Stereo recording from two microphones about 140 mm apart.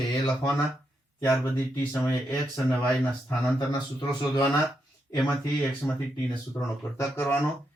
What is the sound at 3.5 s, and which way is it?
Speech, 30° left (ahead or behind).